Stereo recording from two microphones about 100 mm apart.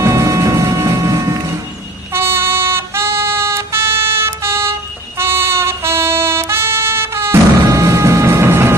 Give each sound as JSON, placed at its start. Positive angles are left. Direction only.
{"t": 0.0, "sound": "music", "side_deg": -30}
{"t": 2.1, "sound": "music", "side_deg": -25}